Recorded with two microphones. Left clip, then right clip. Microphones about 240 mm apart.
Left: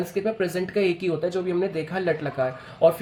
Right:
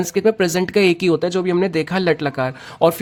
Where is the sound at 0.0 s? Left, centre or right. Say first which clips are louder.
Right 8 dB; right.